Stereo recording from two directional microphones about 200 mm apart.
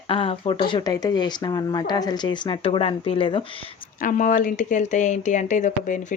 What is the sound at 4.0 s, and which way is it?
Speech, 40° left (ahead or behind).